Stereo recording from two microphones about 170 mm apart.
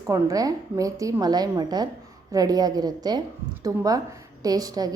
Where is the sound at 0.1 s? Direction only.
20° right (ahead or behind).